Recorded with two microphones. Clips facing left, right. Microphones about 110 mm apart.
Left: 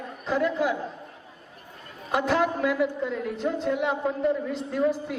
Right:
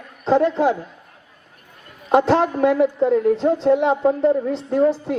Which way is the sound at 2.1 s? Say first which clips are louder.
Right 8 dB; 35° right (ahead or behind).